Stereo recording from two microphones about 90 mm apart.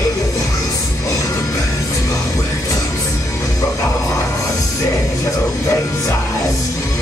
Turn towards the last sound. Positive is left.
turn(degrees=40)  # may be behind; listen again after turning